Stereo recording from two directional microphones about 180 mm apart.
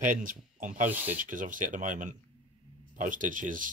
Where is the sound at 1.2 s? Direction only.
45° right (ahead or behind).